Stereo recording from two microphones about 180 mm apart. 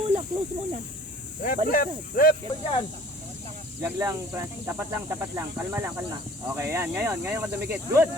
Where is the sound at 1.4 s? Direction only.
50° left (ahead or behind).